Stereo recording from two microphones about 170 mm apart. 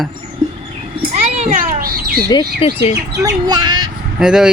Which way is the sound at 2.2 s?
25° left (ahead or behind).